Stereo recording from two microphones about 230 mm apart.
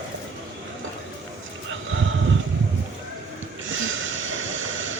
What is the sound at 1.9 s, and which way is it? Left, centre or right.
Sheep, right.